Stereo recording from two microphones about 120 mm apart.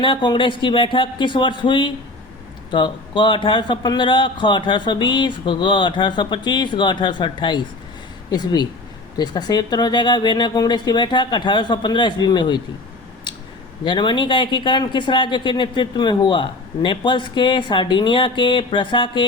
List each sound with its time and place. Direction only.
0.0 s speech: 45° left (ahead or behind)
13.3 s a sound: 40° left (ahead or behind)
13.8 s speech: 40° left (ahead or behind)